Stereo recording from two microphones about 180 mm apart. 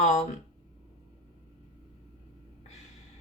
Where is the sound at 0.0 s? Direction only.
40° left (ahead or behind).